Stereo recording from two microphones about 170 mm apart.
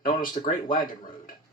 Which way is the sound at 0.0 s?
55° left (ahead or behind).